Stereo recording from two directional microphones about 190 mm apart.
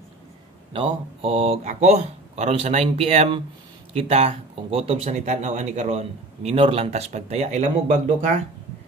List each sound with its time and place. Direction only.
0.7 s speech: 30° right (ahead or behind)